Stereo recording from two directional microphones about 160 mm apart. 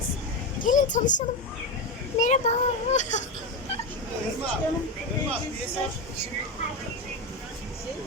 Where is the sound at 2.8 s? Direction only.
50° left (ahead or behind).